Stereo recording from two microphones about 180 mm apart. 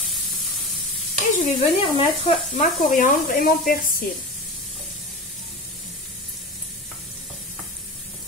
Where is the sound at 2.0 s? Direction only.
35° left (ahead or behind); by 3.7 s 50° left (ahead or behind).